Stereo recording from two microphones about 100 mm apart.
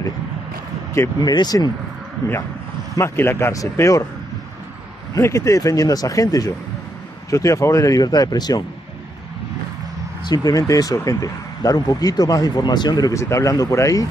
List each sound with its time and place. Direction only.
1.2 s speech: 40° left (ahead or behind)
3.0 s a man's voice: 25° left (ahead or behind)
5.1 s speech: 30° left (ahead or behind)
10.2 s speech: 40° left (ahead or behind)
13.1 s speech: 30° left (ahead or behind)